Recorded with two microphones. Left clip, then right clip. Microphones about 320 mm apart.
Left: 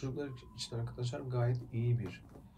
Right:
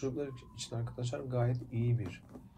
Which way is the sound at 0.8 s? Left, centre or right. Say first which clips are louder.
Right 5 dB; centre.